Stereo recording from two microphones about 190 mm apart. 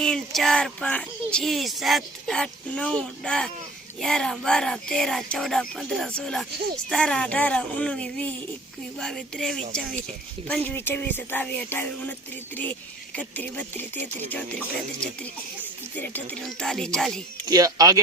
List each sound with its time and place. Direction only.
0.0 s speech: 5° left (ahead or behind)
13.1 s speech: 10° left (ahead or behind)
16.0 s speech: 10° left (ahead or behind)
17.4 s speech: 20° right (ahead or behind)